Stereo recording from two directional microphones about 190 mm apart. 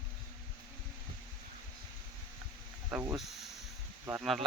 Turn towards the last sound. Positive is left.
turn(degrees=0)  # may be behind; listen again after turning